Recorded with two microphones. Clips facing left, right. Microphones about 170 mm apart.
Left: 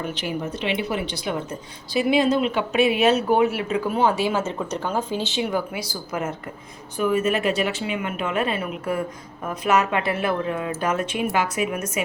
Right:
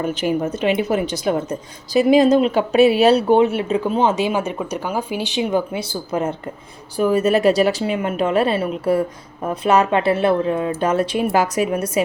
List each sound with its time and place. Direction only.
0.0 s speech: 45° right (ahead or behind)